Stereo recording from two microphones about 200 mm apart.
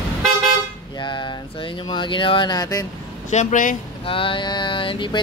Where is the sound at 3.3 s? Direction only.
35° left (ahead or behind).